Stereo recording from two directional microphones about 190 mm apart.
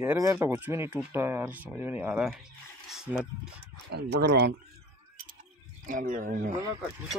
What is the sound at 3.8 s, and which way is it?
Speech, 60° right (ahead or behind).